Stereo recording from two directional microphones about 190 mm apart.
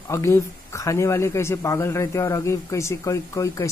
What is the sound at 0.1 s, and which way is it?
A man's voice, 15° left (ahead or behind).